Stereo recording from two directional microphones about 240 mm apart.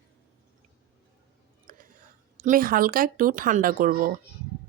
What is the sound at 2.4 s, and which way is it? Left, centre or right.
A woman's voice, right.